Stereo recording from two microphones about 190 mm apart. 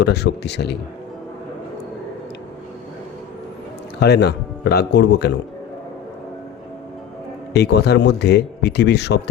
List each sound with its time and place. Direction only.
0.0 s speech: 60° left (ahead or behind)
4.0 s speech: 60° left (ahead or behind)
7.5 s speech: 60° left (ahead or behind)